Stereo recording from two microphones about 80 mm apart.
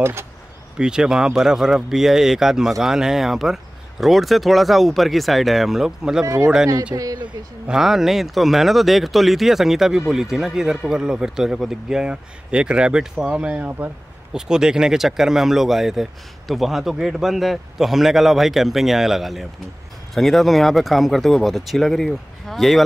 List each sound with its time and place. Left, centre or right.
0.0 s speech: right
0.7 s speech: centre
6.2 s speech: right
6.9 s speech: right
7.6 s speech: centre; by 13.8 s right
14.3 s speech: centre